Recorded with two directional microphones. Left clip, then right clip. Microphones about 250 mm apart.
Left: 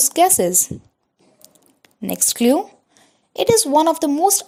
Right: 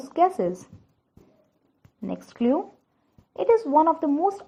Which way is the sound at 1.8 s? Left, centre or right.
Left.